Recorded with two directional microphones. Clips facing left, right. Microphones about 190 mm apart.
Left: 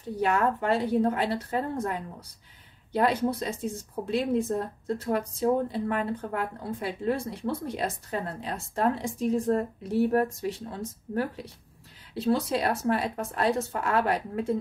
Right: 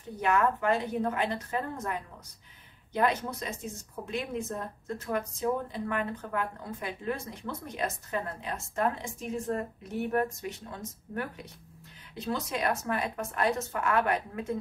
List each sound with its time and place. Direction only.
0.2 s speech: 35° left (ahead or behind)